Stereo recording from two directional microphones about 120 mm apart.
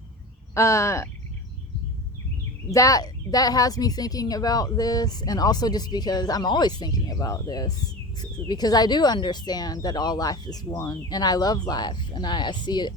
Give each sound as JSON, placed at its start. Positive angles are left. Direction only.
{"t": 0.5, "sound": "speech", "side_deg": 25}
{"t": 2.7, "sound": "speech", "side_deg": 30}